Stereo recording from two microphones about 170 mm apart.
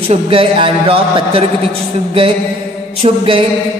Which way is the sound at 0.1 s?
35° right (ahead or behind).